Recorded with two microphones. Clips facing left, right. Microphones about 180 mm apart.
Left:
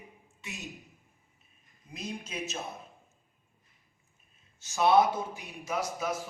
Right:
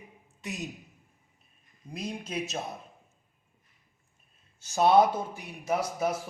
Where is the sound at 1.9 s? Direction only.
35° right (ahead or behind).